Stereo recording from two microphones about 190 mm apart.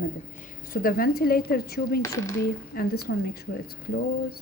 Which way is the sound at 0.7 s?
50° left (ahead or behind).